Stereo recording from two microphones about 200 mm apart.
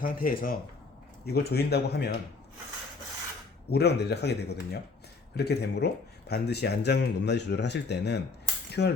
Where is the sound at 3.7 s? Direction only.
55° left (ahead or behind).